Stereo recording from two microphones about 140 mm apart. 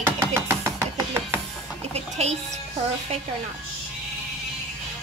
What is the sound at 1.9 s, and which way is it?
Speech, 50° right (ahead or behind).